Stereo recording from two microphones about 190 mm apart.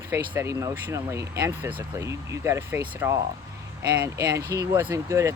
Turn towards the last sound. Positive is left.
turn(degrees=-15)  # may be behind; listen again after turning